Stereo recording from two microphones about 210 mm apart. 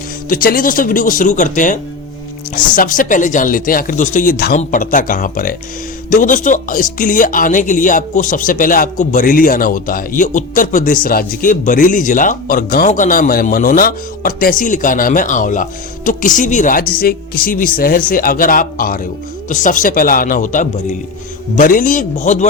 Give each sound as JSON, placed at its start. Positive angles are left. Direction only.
{"t": 0.3, "sound": "speech", "side_deg": 40}